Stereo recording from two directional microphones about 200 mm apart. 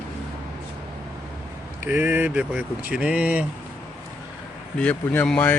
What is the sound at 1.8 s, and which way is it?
Speech, 10° right (ahead or behind).